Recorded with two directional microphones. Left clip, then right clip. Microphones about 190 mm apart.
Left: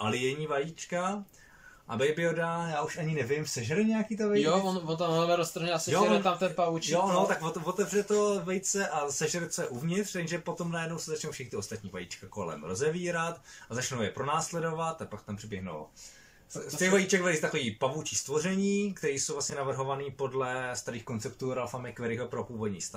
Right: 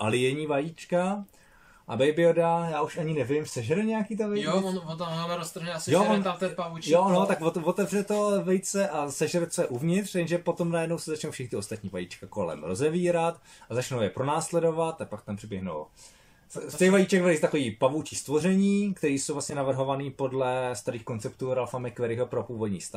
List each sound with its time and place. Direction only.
0.0 s speech: 25° right (ahead or behind)
4.4 s a man's voice: 15° left (ahead or behind)
6.9 s speech: 25° right (ahead or behind)
12.6 s speech: 20° right (ahead or behind)
16.7 s speech: 20° right (ahead or behind)